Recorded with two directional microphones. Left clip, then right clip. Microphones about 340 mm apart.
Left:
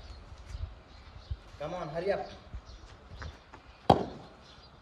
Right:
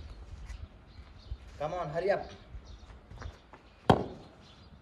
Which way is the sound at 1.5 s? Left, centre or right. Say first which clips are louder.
Right 2 dB; centre.